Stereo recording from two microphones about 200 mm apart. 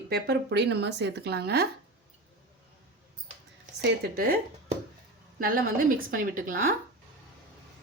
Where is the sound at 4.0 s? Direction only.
50° right (ahead or behind).